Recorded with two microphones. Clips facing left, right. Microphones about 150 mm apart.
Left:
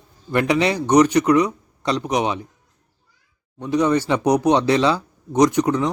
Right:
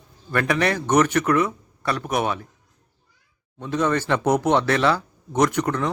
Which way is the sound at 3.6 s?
15° left (ahead or behind).